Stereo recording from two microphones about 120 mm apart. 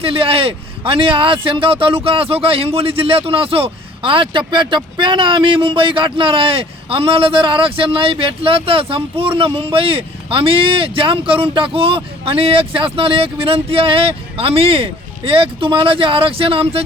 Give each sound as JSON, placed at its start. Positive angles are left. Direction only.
{"t": 0.0, "sound": "speech", "side_deg": -50}